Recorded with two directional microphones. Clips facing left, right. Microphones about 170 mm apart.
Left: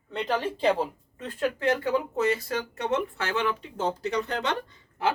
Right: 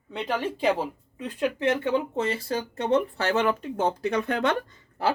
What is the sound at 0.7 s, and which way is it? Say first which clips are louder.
Speech: left 1 dB; 15° right (ahead or behind).